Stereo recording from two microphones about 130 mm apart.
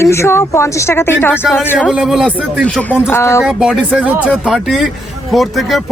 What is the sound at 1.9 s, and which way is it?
Speech, 5° right (ahead or behind).